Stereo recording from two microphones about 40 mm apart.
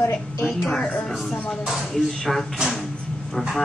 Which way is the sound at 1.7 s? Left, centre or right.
Centre.